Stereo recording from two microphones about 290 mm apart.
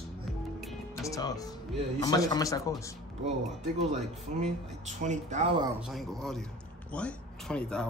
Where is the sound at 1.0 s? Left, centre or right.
Centre.